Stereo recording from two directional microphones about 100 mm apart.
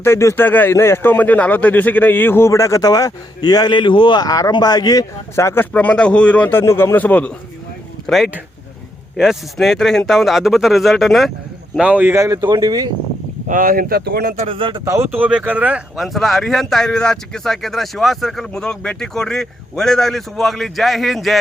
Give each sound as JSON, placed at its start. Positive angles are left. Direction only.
{"t": 0.0, "sound": "a man's voice", "side_deg": 25}
{"t": 5.3, "sound": "speech", "side_deg": 25}
{"t": 5.7, "sound": "a man's voice", "side_deg": 10}
{"t": 8.0, "sound": "speech", "side_deg": 0}
{"t": 11.8, "sound": "speech", "side_deg": -15}
{"t": 12.1, "sound": "speech", "side_deg": -30}
{"t": 14.5, "sound": "speech", "side_deg": -60}
{"t": 15.1, "sound": "speech", "side_deg": -15}
{"t": 16.0, "sound": "speech", "side_deg": 0}